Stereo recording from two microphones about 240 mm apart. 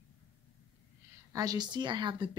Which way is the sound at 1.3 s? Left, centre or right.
Centre.